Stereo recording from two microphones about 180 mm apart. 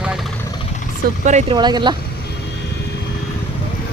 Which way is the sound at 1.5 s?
25° right (ahead or behind).